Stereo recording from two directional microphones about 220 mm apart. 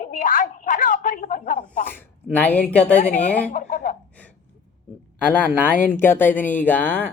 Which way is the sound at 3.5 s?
35° left (ahead or behind).